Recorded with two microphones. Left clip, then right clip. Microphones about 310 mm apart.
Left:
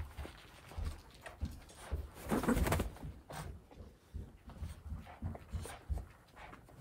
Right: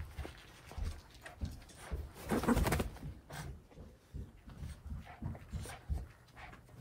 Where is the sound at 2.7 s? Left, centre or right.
Centre.